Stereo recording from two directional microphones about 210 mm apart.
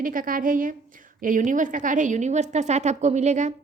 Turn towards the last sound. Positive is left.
turn(degrees=-35)  # may be behind; listen again after turning